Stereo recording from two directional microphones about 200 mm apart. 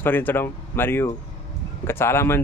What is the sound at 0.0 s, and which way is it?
Speech, 10° left (ahead or behind).